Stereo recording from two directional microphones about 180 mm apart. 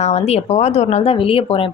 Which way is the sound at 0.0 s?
35° left (ahead or behind).